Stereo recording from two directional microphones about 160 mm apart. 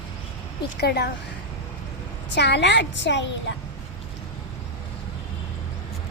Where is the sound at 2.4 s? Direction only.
90° left.